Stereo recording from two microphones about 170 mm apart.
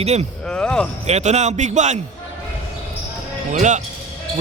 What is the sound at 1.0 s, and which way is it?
Speech, 40° right (ahead or behind).